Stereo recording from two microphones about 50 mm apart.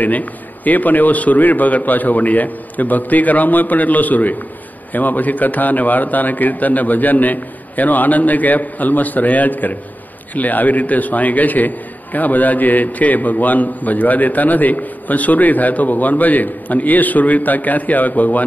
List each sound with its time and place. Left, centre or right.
0.0 s a man's voice: left